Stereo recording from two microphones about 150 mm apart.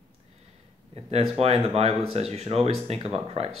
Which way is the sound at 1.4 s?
45° right (ahead or behind).